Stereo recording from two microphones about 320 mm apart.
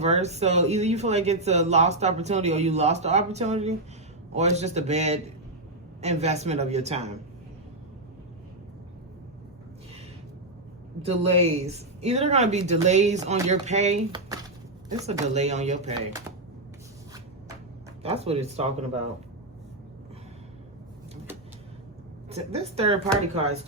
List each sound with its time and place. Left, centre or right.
0.0 s speech: centre
11.0 s speech: centre
18.0 s speech: centre
22.3 s speech: centre